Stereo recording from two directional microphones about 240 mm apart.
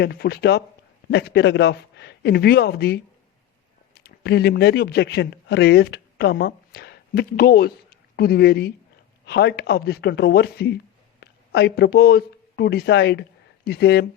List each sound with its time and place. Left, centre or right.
0.0 s speech: left